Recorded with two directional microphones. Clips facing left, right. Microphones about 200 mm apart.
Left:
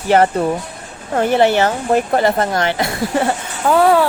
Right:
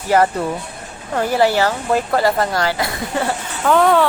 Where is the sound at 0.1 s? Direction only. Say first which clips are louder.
Left 3 dB; 30° left (ahead or behind).